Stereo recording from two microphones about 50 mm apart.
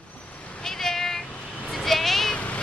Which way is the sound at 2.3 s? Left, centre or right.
Left.